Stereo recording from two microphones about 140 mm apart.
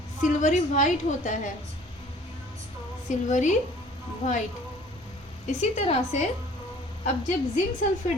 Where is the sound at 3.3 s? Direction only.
60° left (ahead or behind).